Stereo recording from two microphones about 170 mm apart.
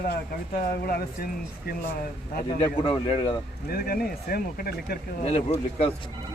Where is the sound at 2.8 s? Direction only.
30° left (ahead or behind).